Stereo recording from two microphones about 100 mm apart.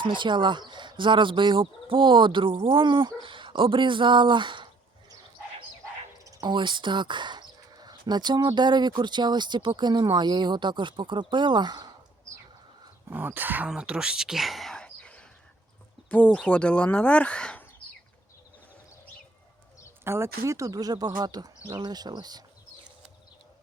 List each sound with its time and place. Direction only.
0.0 s speech: 55° right (ahead or behind)
6.2 s bird: 45° right (ahead or behind)
8.5 s speech: 50° right (ahead or behind)
13.1 s speech: 20° right (ahead or behind)
13.7 s a sound: 10° right (ahead or behind); by 15.3 s 10° left (ahead or behind)
16.0 s speech: 15° left (ahead or behind)
20.1 s speech: 25° right (ahead or behind); by 22.4 s 45° right (ahead or behind)